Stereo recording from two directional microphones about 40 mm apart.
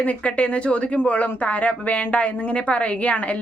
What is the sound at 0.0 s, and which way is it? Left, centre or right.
A woman's voice, left.